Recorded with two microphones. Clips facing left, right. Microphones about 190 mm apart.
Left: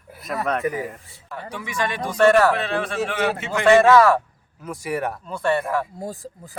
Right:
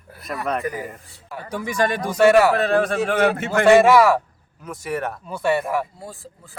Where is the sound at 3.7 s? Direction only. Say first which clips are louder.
Right 1 dB; 10° right (ahead or behind).